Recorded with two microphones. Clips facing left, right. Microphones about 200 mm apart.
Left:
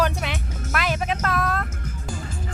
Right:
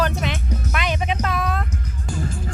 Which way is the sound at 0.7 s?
Centre (ahead or behind).